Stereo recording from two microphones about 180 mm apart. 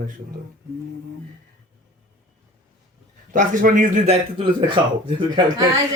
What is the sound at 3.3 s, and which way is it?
Speech, 45° right (ahead or behind).